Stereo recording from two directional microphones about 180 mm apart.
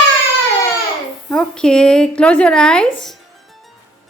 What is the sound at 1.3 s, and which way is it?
A woman's voice, 5° left (ahead or behind).